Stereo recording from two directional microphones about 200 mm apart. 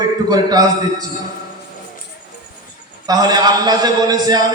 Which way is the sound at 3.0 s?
20° right (ahead or behind).